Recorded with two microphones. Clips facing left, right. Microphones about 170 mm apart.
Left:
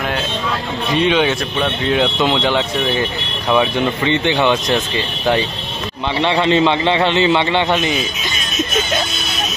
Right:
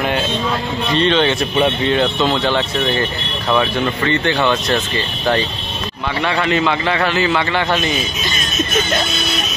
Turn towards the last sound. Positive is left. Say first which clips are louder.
# left 2 dB
turn(degrees=20)  # may be behind; listen again after turning